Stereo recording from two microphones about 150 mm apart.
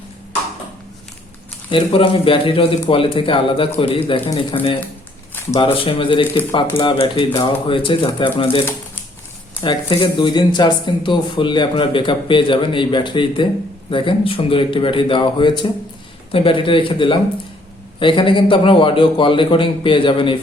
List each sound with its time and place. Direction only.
1.7 s speech: 35° left (ahead or behind)